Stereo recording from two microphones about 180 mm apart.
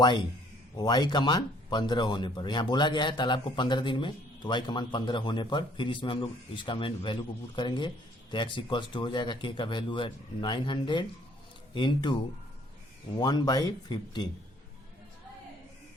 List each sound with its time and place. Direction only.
0.0 s speech: 25° left (ahead or behind)
13.1 s speech: 20° left (ahead or behind)